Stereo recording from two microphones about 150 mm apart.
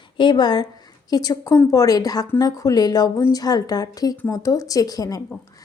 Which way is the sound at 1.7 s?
25° left (ahead or behind).